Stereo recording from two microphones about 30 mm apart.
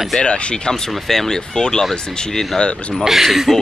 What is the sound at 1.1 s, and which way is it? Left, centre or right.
Speech, centre.